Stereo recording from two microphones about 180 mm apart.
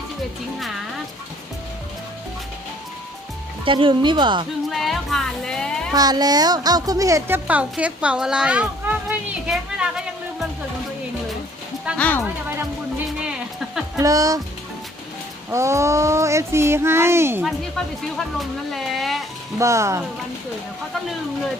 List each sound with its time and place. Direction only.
3.7 s speech: 30° right (ahead or behind)
4.7 s music: centre (ahead or behind)
5.9 s a woman's voice: 20° right (ahead or behind); by 10.0 s 5° right (ahead or behind)
11.9 s speech: 10° left (ahead or behind)
14.0 s speech: 20° right (ahead or behind)
15.4 s a woman's voice: 15° right (ahead or behind)
18.2 s speech: centre (ahead or behind)
19.5 s a woman's voice: 15° right (ahead or behind)